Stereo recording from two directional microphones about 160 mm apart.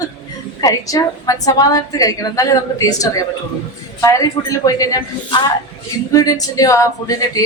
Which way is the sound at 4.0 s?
20° left (ahead or behind).